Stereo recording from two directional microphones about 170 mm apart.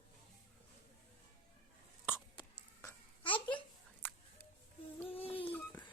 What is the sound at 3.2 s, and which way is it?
Babbling, 30° left (ahead or behind).